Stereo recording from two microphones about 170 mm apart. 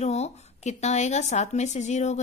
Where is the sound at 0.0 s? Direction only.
40° left (ahead or behind).